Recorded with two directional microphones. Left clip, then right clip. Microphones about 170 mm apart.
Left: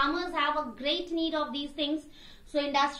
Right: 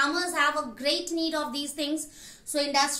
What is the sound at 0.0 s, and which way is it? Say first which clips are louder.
A woman's voice: right 3 dB; 40° right (ahead or behind).